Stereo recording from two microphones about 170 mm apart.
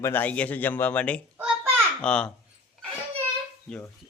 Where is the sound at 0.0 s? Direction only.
10° left (ahead or behind).